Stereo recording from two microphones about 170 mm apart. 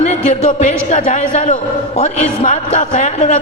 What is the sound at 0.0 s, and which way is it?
A woman's voice, 40° left (ahead or behind).